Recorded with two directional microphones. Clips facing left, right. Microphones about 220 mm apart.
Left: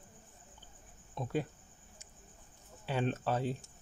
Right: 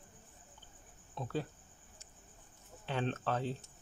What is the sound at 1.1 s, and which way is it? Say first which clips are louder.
Speech: left 3 dB; 15° left (ahead or behind).